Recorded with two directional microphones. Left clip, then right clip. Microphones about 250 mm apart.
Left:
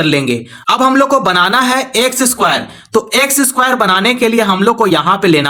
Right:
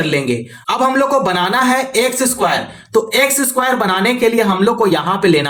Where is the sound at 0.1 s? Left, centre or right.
Left.